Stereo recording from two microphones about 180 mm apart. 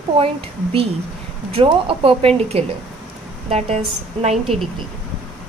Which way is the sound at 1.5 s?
30° right (ahead or behind).